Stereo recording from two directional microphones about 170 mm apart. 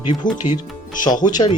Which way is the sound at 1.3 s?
25° left (ahead or behind).